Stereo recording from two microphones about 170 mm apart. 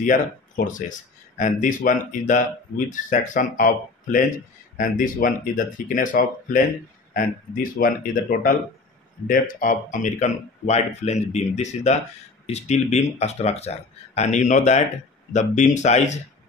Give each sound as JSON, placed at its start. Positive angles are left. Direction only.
{"t": 0.0, "sound": "speech", "side_deg": 50}